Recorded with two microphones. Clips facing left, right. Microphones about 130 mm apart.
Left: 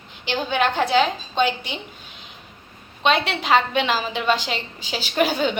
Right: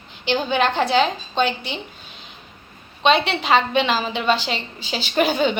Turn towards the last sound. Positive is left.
turn(degrees=5)  # may be behind; listen again after turning